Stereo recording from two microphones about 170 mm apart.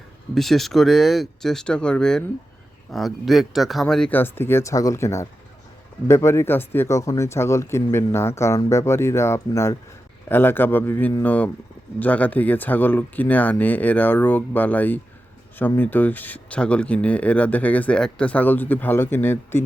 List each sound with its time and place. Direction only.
0.3 s speech: centre (ahead or behind)